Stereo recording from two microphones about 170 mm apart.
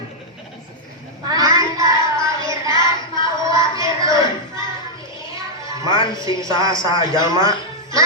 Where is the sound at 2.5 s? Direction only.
25° left (ahead or behind).